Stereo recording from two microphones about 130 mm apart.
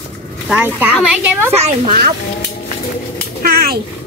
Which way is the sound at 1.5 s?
55° right (ahead or behind).